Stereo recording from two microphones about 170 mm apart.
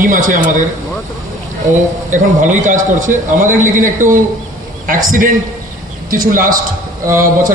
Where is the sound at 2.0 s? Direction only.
50° right (ahead or behind).